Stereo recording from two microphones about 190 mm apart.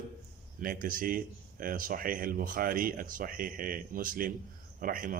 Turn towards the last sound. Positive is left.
turn(degrees=-45)  # may be behind; listen again after turning